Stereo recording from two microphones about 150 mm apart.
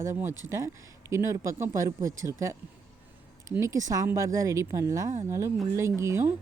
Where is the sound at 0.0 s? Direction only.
15° right (ahead or behind).